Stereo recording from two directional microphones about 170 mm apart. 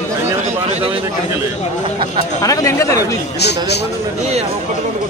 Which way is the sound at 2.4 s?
20° left (ahead or behind).